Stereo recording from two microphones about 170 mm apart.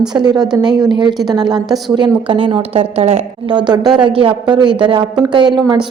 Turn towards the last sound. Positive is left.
turn(degrees=-25)  # may be behind; listen again after turning